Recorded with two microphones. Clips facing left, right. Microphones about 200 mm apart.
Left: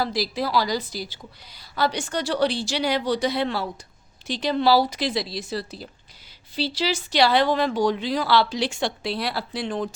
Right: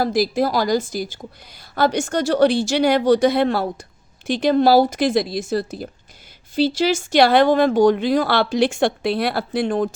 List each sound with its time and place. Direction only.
0.0 s speech: 50° right (ahead or behind)